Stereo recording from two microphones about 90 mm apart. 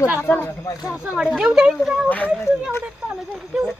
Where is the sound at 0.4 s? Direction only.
40° left (ahead or behind).